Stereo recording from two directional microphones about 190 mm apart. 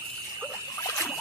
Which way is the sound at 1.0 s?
10° left (ahead or behind).